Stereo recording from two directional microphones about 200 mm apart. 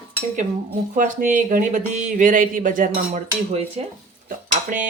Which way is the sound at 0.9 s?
40° right (ahead or behind).